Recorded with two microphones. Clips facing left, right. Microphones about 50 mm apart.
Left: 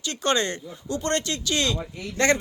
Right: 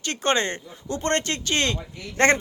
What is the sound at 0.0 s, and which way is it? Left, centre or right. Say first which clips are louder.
Speech: right 1 dB; right.